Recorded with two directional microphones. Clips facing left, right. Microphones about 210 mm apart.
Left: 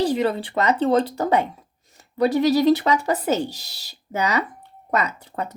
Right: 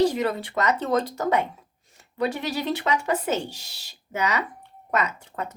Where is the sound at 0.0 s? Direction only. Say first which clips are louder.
Left 1 dB; 30° left (ahead or behind).